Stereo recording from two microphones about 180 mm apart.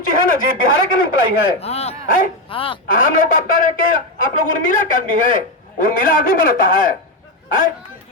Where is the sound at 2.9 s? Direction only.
50° left (ahead or behind).